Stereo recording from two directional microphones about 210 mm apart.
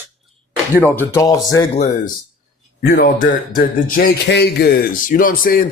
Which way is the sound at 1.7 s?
30° left (ahead or behind).